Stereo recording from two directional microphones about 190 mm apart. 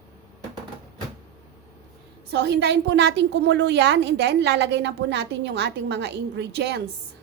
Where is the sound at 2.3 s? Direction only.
65° right (ahead or behind).